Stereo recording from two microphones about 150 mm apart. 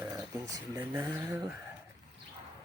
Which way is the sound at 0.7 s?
20° right (ahead or behind).